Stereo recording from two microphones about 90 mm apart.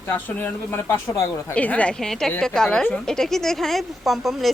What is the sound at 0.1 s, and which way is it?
A woman's voice, 25° left (ahead or behind).